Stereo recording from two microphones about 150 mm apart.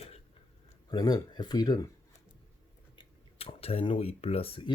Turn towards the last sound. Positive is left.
turn(degrees=40)  # may be behind; listen again after turning